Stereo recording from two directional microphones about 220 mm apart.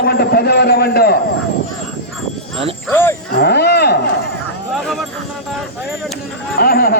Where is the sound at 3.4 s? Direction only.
50° left (ahead or behind).